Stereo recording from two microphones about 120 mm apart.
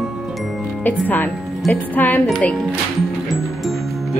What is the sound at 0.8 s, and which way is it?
Speech, 15° left (ahead or behind).